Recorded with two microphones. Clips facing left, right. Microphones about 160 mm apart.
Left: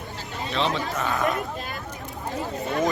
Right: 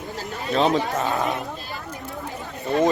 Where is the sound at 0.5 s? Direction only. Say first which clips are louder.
Right 6 dB; 40° right (ahead or behind).